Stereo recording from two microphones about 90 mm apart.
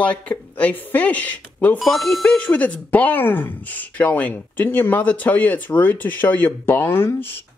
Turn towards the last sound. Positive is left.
turn(degrees=25)  # may be behind; listen again after turning